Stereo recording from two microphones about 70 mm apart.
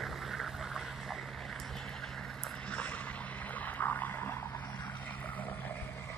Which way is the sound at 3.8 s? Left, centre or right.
Left.